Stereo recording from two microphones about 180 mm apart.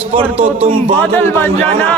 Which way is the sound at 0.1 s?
35° right (ahead or behind).